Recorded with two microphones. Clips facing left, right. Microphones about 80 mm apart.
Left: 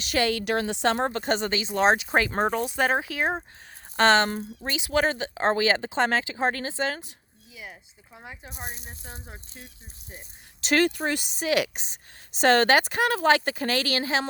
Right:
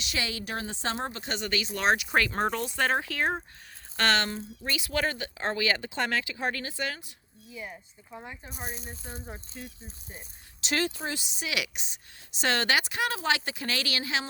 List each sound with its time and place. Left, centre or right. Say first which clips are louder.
0.0 s a woman's voice: left 9 dB; left
1.2 s speech: left 8 dB; left
1.5 s speech: left 3 dB; left
4.3 s speech: left 4 dB; left
4.7 s speech: left 5 dB; left
8.1 s speech: right 1 dB; centre
10.6 s speech: left 7 dB; left